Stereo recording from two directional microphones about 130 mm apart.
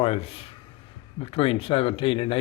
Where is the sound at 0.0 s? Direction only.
50° left (ahead or behind).